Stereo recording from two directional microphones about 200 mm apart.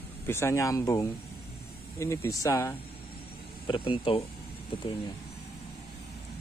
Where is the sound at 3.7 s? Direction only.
25° left (ahead or behind).